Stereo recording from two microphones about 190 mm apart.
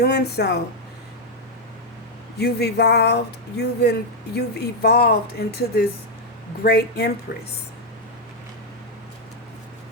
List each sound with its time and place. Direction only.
0.0 s speech: 60° left (ahead or behind)
2.4 s speech: 60° left (ahead or behind)